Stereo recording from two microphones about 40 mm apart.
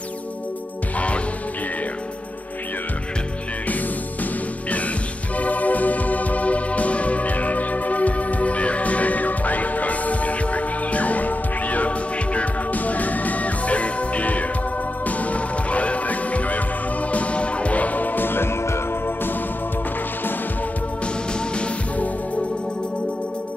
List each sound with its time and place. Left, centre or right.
0.9 s music: left
4.2 s music: left